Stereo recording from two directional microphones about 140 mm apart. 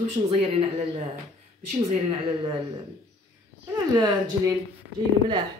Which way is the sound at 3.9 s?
30° right (ahead or behind).